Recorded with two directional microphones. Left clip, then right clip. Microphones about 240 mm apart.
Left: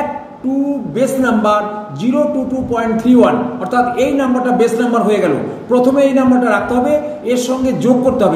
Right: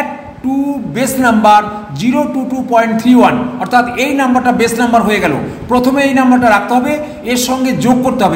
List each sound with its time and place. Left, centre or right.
0.9 s a man's voice: right
2.7 s a man's voice: right